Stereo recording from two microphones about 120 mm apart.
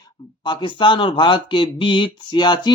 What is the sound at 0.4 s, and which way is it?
Speech, 40° left (ahead or behind).